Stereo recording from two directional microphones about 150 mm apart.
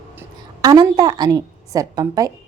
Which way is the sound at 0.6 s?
25° right (ahead or behind).